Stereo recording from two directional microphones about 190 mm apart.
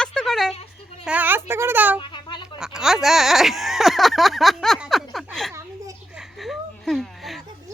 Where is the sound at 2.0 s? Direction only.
25° left (ahead or behind).